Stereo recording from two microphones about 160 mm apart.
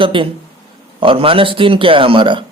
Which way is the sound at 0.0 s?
35° right (ahead or behind).